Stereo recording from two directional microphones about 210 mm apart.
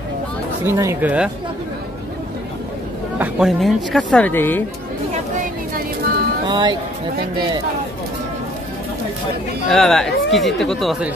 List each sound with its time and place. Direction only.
0.7 s speech: 10° right (ahead or behind)
3.2 s speech: centre (ahead or behind)
5.4 s a sound: 45° right (ahead or behind)
6.4 s speech: 20° right (ahead or behind)
9.7 s speech: 5° left (ahead or behind)